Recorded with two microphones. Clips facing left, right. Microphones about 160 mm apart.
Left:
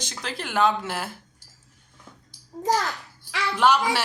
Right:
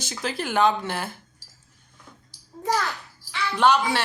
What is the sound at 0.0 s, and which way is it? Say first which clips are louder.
Speech: right 4 dB; 5° right (ahead or behind).